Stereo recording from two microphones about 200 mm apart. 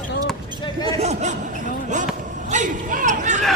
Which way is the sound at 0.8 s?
35° right (ahead or behind).